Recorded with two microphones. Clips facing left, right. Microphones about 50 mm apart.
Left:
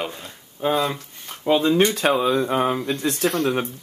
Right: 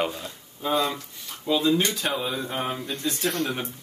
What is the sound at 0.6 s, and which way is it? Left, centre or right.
Speech, left.